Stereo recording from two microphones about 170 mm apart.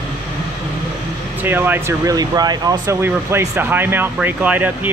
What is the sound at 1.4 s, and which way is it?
Speech, 10° right (ahead or behind).